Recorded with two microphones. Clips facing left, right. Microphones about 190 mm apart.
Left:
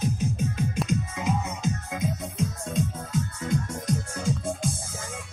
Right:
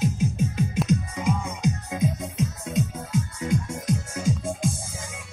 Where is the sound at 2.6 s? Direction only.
10° right (ahead or behind).